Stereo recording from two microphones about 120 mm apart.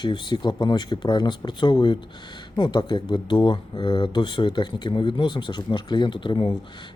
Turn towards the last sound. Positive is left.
turn(degrees=40)  # may be behind; listen again after turning